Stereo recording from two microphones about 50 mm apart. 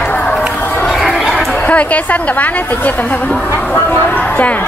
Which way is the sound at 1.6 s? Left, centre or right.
Left.